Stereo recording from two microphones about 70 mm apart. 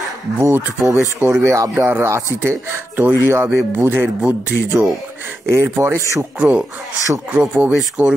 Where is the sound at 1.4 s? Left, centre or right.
Right.